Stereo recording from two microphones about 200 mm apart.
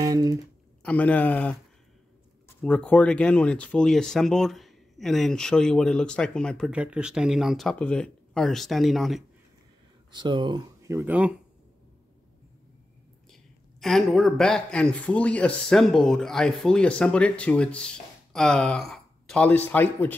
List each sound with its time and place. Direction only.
0.0 s a sound: 15° right (ahead or behind)
0.8 s a man's voice: 5° left (ahead or behind)
10.1 s speech: 20° right (ahead or behind)
13.3 s speech: centre (ahead or behind)